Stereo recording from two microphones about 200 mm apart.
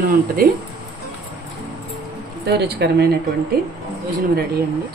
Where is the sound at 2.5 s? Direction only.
55° right (ahead or behind).